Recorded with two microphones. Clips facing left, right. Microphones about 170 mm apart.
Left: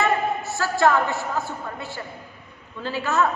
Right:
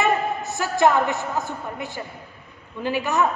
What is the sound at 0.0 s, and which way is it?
A man's voice, 15° right (ahead or behind).